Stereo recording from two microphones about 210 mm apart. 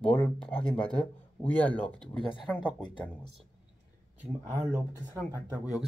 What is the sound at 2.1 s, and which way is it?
Speech, 25° left (ahead or behind).